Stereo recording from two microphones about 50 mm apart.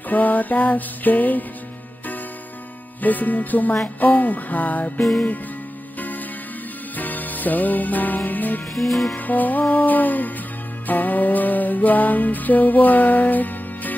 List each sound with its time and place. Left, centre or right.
0.1 s music: left
3.0 s music: left
8.7 s music: centre
9.1 s music: left